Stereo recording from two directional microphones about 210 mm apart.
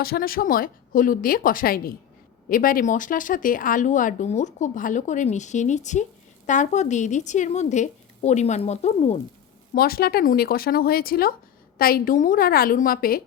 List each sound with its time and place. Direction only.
0.0 s a woman's voice: 45° left (ahead or behind)
9.7 s a woman's voice: 45° left (ahead or behind)